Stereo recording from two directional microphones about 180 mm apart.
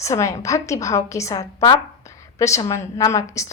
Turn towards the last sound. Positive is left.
turn(degrees=15)  # may be behind; listen again after turning